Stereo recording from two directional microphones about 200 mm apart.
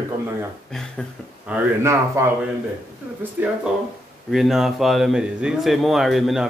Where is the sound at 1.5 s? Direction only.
15° right (ahead or behind).